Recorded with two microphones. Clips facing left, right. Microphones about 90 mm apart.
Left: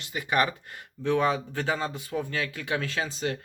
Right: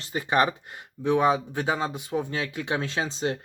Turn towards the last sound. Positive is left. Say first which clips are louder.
# right 2 dB
turn(degrees=-25)  # may be behind; listen again after turning